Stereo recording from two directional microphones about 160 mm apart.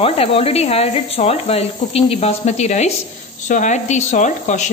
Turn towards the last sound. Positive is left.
turn(degrees=45)  # may be behind; listen again after turning